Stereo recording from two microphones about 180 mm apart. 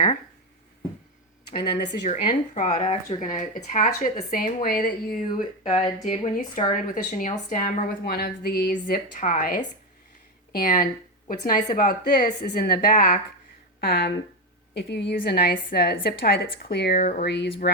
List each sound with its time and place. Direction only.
2.0 s speech: 45° left (ahead or behind)
2.8 s speech: 30° left (ahead or behind)
3.2 s speech: 45° left (ahead or behind)
4.3 s speech: 50° left (ahead or behind)
5.6 s a woman's voice: 40° left (ahead or behind); by 17.0 s 60° left (ahead or behind)
17.0 s speech: 45° left (ahead or behind)
17.2 s speech: 70° left (ahead or behind)